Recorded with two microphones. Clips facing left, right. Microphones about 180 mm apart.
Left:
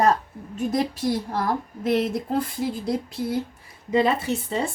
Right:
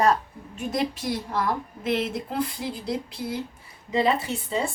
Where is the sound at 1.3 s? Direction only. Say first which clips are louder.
Left 1 dB; 45° left (ahead or behind).